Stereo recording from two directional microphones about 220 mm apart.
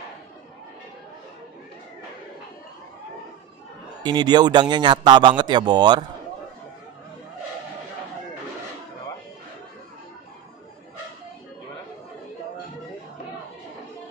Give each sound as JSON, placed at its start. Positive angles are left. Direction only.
{"t": 4.0, "sound": "a man's voice", "side_deg": -20}